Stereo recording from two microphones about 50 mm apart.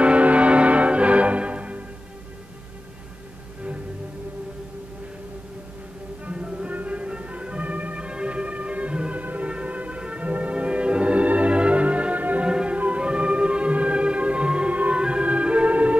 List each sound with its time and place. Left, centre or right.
0.0 s music: right
6.2 s music: right
12.4 s music: centre